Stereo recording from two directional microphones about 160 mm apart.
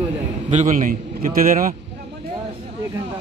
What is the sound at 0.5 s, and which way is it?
A man's voice, 50° right (ahead or behind).